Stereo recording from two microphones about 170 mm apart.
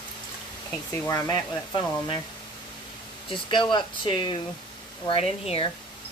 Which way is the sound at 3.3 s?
30° left (ahead or behind).